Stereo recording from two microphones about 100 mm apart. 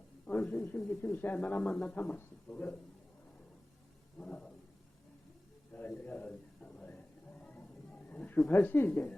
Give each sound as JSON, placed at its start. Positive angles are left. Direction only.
{"t": 0.3, "sound": "a man's voice", "side_deg": 15}
{"t": 4.2, "sound": "a man's voice", "side_deg": 10}
{"t": 5.7, "sound": "a sound", "side_deg": 15}